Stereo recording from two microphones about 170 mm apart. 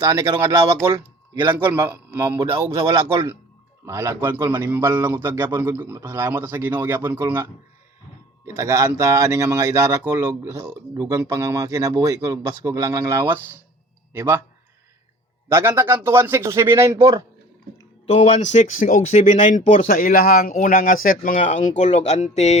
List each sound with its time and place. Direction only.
0.0 s speech: 20° right (ahead or behind)
1.5 s a man's voice: 15° right (ahead or behind)
3.8 s a man's voice: 15° right (ahead or behind)
8.4 s a man's voice: 20° right (ahead or behind)
15.5 s a man's voice: 15° right (ahead or behind)
18.1 s speech: 45° left (ahead or behind)